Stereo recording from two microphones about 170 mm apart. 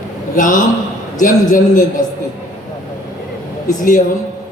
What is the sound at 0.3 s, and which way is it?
A man's voice, 50° left (ahead or behind).